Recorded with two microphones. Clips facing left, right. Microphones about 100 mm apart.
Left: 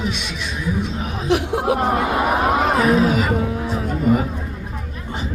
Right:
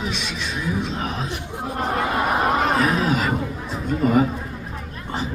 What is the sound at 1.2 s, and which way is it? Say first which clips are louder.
Speech: left 11 dB; 90° left.